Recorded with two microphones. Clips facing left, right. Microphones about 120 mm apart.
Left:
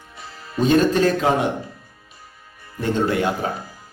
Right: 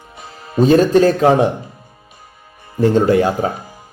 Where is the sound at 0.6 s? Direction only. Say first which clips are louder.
Right 6 dB; 40° right (ahead or behind).